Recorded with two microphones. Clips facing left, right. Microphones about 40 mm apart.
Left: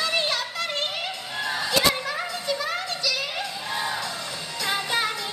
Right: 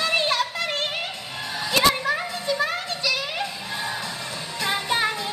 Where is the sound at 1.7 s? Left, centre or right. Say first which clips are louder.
Right 4 dB; right.